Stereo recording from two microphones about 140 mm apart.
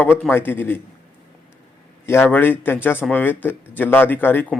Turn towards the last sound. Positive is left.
turn(degrees=15)  # may be behind; listen again after turning